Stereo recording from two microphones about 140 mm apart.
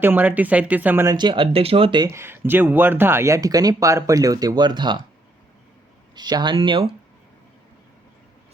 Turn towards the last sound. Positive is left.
turn(degrees=-40)  # may be behind; listen again after turning